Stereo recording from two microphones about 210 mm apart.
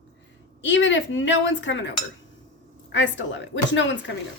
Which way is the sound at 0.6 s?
60° left (ahead or behind).